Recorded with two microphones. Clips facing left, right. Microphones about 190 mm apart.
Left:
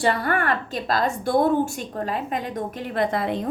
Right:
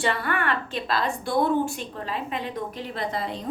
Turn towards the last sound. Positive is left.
turn(degrees=55)  # may be behind; listen again after turning